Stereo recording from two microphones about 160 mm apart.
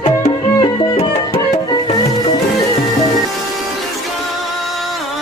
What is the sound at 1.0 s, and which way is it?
Music, 40° left (ahead or behind).